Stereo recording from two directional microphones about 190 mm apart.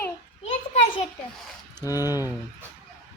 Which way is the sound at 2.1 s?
10° right (ahead or behind).